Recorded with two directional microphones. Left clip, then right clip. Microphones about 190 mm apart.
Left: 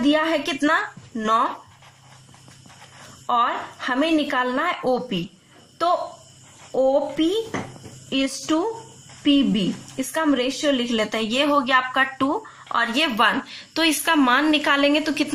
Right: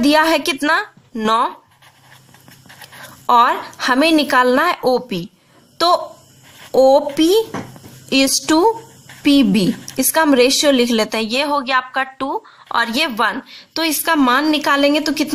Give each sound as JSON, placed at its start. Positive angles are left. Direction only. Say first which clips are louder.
{"t": 0.0, "sound": "a woman's voice", "louder": "right 7 dB", "side_deg": -45}
{"t": 3.3, "sound": "a woman's voice", "louder": "right 8 dB", "side_deg": -50}